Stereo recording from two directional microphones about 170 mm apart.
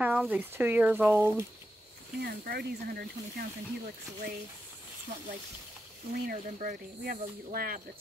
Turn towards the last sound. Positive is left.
turn(degrees=-60)  # may be behind; listen again after turning